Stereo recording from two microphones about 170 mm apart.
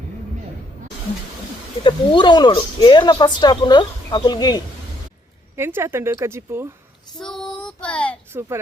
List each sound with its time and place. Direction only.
1.8 s speech: 25° left (ahead or behind)
5.5 s a woman's voice: 15° right (ahead or behind)
7.2 s child singing: 5° left (ahead or behind)
8.3 s a child's voice: 15° right (ahead or behind)